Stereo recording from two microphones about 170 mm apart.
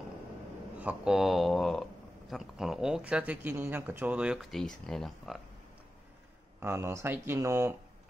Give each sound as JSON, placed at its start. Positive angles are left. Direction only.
{"t": 0.7, "sound": "speech", "side_deg": -5}
{"t": 6.6, "sound": "speech", "side_deg": -15}